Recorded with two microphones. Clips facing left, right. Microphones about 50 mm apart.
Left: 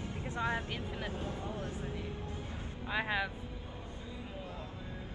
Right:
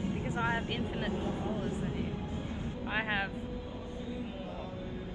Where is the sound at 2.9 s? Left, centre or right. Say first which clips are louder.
Right 1 dB; right.